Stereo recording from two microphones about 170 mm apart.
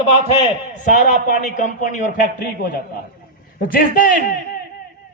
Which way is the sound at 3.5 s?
55° left (ahead or behind).